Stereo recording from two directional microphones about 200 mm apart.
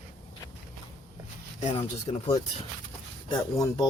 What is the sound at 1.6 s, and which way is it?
Speech, 30° left (ahead or behind).